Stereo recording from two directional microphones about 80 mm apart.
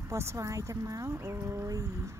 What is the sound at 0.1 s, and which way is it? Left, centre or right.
Speech, right.